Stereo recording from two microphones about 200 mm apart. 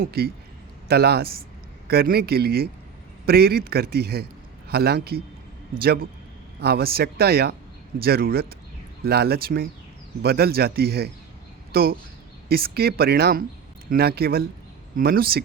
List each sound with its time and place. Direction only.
0.0 s a man's voice: 50° right (ahead or behind)